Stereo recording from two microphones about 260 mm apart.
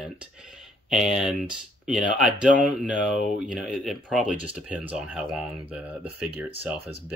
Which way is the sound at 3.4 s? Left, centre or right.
Centre.